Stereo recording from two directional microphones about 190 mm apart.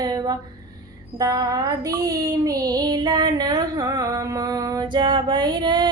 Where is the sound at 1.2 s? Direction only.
20° right (ahead or behind).